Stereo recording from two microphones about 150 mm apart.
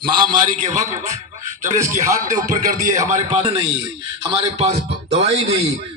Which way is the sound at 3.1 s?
55° right (ahead or behind).